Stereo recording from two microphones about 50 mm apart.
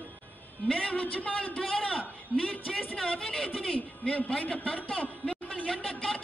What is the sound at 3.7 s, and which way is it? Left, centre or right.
A man's voice, left.